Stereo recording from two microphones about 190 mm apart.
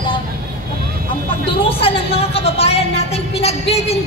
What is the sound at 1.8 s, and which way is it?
Speech, 30° left (ahead or behind).